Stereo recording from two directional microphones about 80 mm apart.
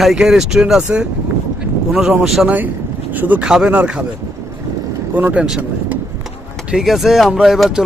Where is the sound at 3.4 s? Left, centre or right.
Centre.